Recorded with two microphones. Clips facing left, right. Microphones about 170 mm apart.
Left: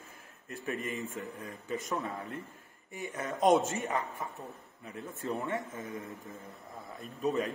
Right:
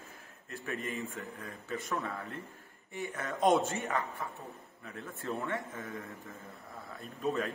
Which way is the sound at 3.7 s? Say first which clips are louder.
Left 1 dB; 20° left (ahead or behind).